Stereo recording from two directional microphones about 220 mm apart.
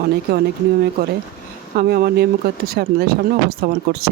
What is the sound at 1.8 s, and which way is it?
Speech, 45° right (ahead or behind).